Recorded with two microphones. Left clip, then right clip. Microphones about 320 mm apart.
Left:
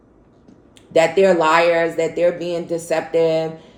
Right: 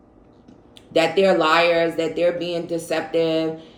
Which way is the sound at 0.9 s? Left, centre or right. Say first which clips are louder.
Left 3 dB; centre.